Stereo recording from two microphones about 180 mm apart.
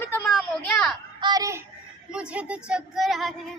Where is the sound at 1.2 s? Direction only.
25° right (ahead or behind).